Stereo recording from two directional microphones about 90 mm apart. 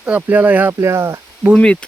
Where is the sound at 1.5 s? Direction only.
10° left (ahead or behind).